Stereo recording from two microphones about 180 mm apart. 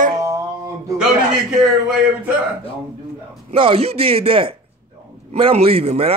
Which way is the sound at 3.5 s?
30° right (ahead or behind).